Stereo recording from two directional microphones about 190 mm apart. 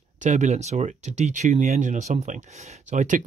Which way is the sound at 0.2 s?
40° right (ahead or behind).